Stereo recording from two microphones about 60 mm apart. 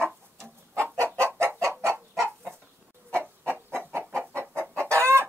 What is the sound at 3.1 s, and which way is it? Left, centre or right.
Chicken, right.